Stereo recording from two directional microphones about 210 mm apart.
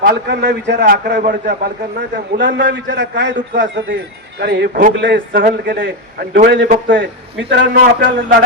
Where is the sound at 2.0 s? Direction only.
55° right (ahead or behind).